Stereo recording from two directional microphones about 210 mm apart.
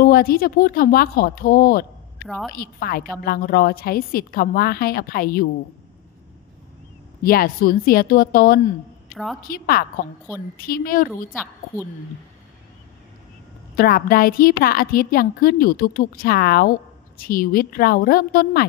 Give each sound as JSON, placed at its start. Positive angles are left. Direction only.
{"t": 0.0, "sound": "a woman's voice", "side_deg": 45}
{"t": 2.2, "sound": "a woman's voice", "side_deg": 0}
{"t": 2.5, "sound": "a woman's voice", "side_deg": 45}
{"t": 7.2, "sound": "a woman's voice", "side_deg": 45}
{"t": 9.1, "sound": "a woman's voice", "side_deg": 0}
{"t": 9.4, "sound": "a woman's voice", "side_deg": 45}
{"t": 13.7, "sound": "a woman's voice", "side_deg": 45}